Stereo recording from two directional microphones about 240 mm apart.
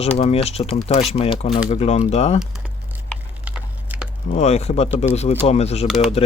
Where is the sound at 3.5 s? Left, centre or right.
Centre.